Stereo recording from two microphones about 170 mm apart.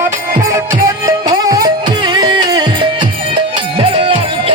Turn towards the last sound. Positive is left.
turn(degrees=-30)  # may be behind; listen again after turning